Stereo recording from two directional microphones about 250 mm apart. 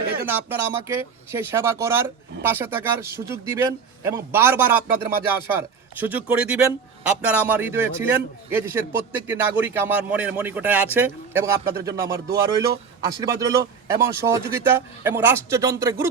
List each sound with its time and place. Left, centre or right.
0.3 s speech: centre